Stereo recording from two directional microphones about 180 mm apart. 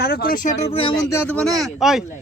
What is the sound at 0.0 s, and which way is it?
Speech, 55° left (ahead or behind).